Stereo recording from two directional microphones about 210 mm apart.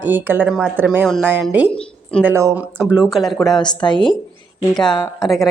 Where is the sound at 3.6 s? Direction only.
20° left (ahead or behind).